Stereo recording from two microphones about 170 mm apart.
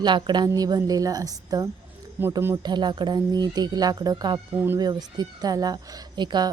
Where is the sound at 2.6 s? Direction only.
25° right (ahead or behind).